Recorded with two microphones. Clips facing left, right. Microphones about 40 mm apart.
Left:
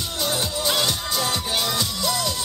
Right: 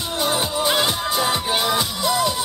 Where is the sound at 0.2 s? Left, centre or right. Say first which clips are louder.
Right 4 dB; right.